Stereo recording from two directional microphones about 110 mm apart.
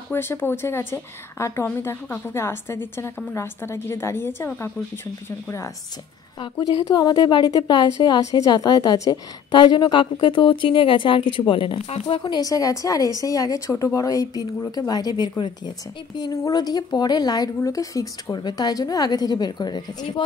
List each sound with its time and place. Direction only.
0.1 s a woman's voice: 20° left (ahead or behind)
6.9 s a woman's voice: 40° left (ahead or behind)
9.5 s speech: 45° left (ahead or behind)
11.9 s speech: 75° left (ahead or behind)
12.2 s a woman's voice: 40° left (ahead or behind)